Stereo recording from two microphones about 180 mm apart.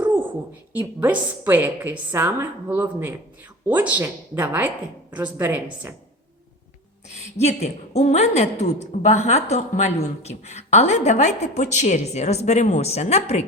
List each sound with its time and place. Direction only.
0.0 s a sound: 10° right (ahead or behind)
0.8 s a woman's voice: 10° right (ahead or behind)
7.3 s a woman's voice: 35° left (ahead or behind)